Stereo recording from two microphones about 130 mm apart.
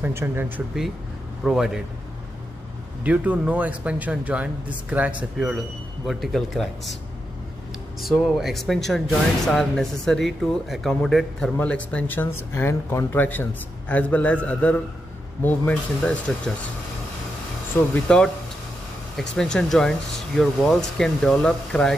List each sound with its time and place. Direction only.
0.0 s a man's voice: 15° right (ahead or behind)
1.4 s speech: 5° right (ahead or behind)
3.0 s a man's voice: 10° right (ahead or behind)
8.0 s speech: centre (ahead or behind)
17.9 s speech: 5° left (ahead or behind)